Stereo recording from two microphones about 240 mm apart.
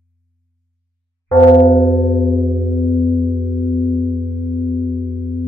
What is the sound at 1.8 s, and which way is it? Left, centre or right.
Music, left.